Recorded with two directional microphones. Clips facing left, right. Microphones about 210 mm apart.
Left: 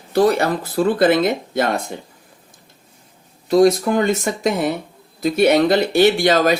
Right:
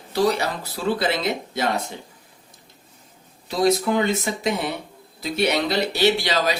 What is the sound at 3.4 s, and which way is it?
Speech, 50° left (ahead or behind).